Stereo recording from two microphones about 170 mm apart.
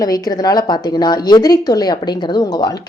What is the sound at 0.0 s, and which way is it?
Speech, 20° left (ahead or behind).